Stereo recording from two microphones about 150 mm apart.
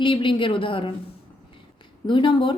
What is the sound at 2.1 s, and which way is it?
Speech, 35° left (ahead or behind).